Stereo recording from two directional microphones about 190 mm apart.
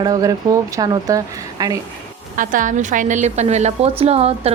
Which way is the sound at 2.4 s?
45° right (ahead or behind).